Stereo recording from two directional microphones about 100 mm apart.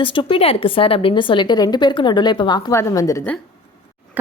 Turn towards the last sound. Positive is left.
turn(degrees=35)  # may be behind; listen again after turning